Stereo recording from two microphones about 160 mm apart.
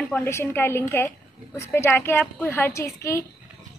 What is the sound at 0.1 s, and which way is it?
A woman's voice, 15° left (ahead or behind).